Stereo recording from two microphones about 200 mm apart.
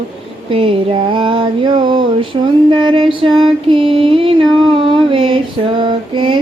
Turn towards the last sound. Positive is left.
turn(degrees=-25)  # may be behind; listen again after turning